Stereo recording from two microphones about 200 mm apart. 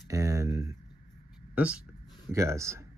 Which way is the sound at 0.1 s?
15° right (ahead or behind).